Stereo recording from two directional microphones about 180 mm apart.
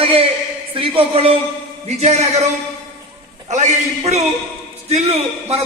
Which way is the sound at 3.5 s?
40° right (ahead or behind).